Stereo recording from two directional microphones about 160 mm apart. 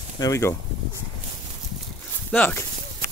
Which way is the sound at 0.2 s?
20° left (ahead or behind).